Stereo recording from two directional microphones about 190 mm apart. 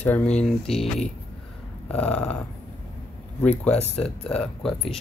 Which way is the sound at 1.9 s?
5° left (ahead or behind).